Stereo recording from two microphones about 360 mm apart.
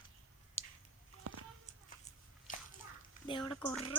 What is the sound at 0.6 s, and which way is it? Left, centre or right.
Squish, centre.